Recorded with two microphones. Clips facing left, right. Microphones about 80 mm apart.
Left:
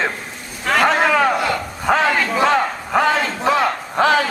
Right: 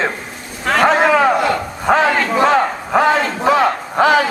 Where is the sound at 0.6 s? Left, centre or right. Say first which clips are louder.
Right 2 dB; centre.